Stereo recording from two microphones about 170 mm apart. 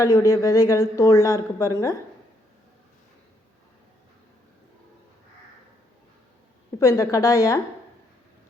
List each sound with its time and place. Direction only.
0.0 s a woman's voice: 20° left (ahead or behind)
6.7 s a woman's voice: 20° left (ahead or behind)